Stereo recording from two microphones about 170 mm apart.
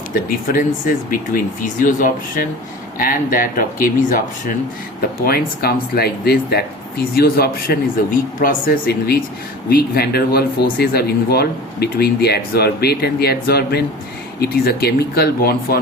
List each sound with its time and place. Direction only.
0.1 s speech: 55° left (ahead or behind)
5.2 s speech: 60° left (ahead or behind)